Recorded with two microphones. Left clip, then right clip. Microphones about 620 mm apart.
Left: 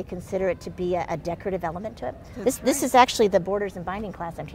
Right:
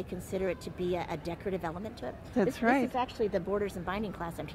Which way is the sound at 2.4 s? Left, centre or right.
Right.